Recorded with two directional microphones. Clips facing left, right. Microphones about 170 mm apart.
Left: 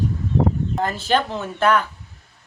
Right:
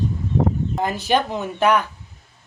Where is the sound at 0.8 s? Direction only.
15° right (ahead or behind).